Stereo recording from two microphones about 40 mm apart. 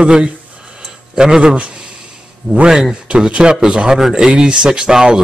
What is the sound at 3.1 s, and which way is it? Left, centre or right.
Speech, right.